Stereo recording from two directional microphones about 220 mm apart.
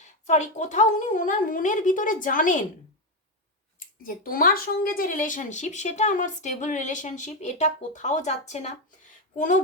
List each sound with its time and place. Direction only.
0.0 s speech: 35° left (ahead or behind)
4.0 s speech: 40° left (ahead or behind)